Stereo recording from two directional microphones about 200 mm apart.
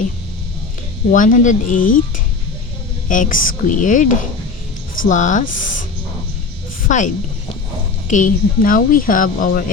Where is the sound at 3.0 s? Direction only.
40° left (ahead or behind).